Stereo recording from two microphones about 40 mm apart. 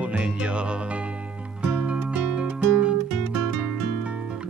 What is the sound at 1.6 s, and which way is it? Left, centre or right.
Music, right.